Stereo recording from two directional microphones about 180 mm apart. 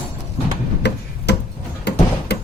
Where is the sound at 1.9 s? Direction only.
70° left (ahead or behind).